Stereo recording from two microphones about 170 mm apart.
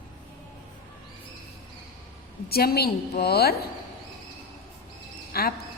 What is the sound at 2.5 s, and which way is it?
A woman's voice, 65° left (ahead or behind).